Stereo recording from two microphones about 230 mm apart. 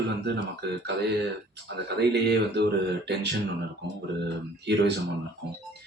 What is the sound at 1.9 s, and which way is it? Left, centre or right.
Speech, right.